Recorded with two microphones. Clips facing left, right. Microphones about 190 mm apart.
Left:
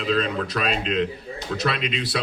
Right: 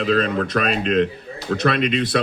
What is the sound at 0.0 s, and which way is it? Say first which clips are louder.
Speech: right 4 dB; 50° right (ahead or behind).